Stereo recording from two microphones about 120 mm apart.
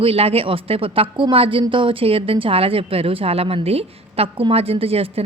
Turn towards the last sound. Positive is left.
turn(degrees=-55)  # may be behind; listen again after turning